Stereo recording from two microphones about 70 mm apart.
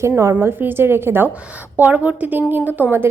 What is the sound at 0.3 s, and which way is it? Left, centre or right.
A woman's voice, right.